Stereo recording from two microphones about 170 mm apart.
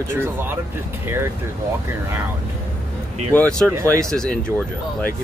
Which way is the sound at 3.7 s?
20° right (ahead or behind).